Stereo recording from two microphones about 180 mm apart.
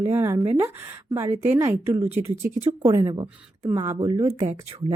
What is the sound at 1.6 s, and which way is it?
Speech, 15° right (ahead or behind).